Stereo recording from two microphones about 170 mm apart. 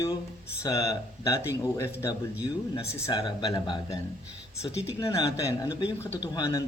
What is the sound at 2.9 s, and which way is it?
Speech, 15° left (ahead or behind).